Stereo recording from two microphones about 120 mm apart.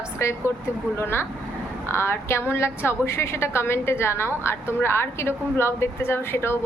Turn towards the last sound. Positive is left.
turn(degrees=20)  # may be behind; listen again after turning